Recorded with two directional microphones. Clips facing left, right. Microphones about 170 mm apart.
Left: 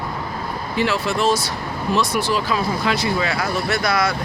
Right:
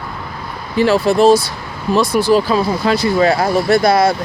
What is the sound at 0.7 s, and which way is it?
Speech, 35° right (ahead or behind).